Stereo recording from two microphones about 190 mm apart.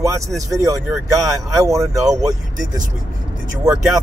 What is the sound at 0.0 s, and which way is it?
Speech, 15° right (ahead or behind).